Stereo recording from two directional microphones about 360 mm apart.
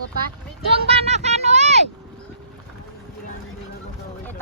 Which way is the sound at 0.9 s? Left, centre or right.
Centre.